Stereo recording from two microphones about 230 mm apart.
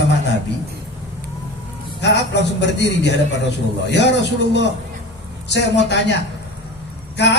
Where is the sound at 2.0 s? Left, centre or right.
Left.